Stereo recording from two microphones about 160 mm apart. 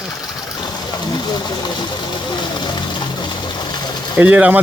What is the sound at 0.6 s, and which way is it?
Speech, 25° left (ahead or behind).